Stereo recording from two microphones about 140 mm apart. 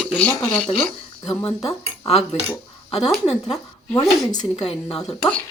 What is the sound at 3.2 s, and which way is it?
A woman's voice, 50° left (ahead or behind).